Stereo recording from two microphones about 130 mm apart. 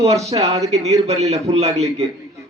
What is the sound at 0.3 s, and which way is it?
A man's voice, 55° right (ahead or behind).